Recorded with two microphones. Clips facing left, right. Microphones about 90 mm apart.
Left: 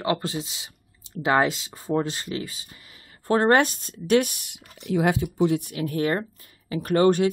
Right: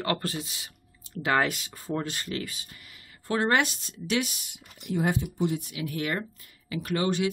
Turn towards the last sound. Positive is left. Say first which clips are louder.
# left 8 dB
turn(degrees=45)  # may be behind; listen again after turning